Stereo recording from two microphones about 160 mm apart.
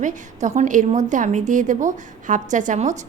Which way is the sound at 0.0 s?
50° right (ahead or behind).